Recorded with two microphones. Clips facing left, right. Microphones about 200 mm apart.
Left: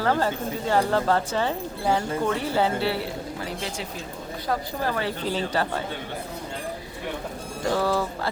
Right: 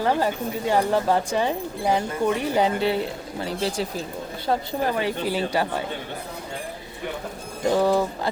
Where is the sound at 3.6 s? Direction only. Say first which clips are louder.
Right 6 dB; 35° right (ahead or behind); by 5.8 s 15° right (ahead or behind).